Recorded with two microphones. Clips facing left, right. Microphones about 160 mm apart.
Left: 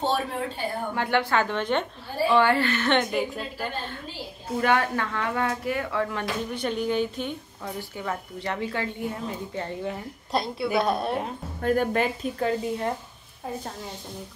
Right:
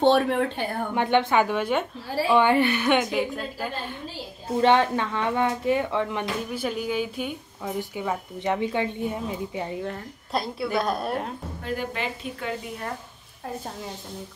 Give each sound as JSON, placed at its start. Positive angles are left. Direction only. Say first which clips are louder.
{"t": 0.1, "sound": "speech", "louder": "right 6 dB", "side_deg": -65}
{"t": 0.9, "sound": "a woman's voice", "louder": "right 4 dB", "side_deg": -20}
{"t": 4.6, "sound": "speech", "louder": "right 4 dB", "side_deg": -25}
{"t": 6.5, "sound": "a woman's voice", "louder": "left 2 dB", "side_deg": -5}
{"t": 9.8, "sound": "a woman's voice", "louder": "left 1 dB", "side_deg": 0}
{"t": 11.6, "sound": "a woman's voice", "louder": "left 7 dB", "side_deg": 50}